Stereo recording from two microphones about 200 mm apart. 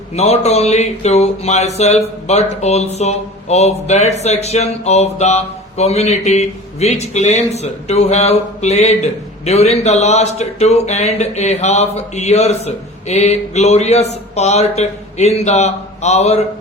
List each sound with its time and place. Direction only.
0.2 s speech: 30° left (ahead or behind)